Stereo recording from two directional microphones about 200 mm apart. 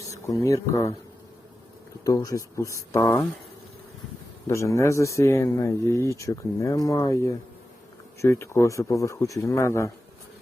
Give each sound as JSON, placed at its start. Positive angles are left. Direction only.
{"t": 0.1, "sound": "speech", "side_deg": 15}
{"t": 2.0, "sound": "speech", "side_deg": 15}
{"t": 4.4, "sound": "speech", "side_deg": 15}